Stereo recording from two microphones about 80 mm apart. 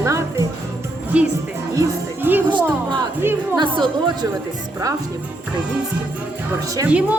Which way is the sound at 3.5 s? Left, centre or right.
Right.